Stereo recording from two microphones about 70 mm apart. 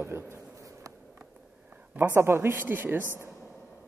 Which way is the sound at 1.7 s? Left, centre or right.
Right.